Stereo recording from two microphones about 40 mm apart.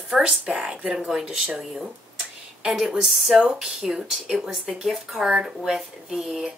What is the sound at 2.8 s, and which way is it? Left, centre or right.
A woman's voice, centre.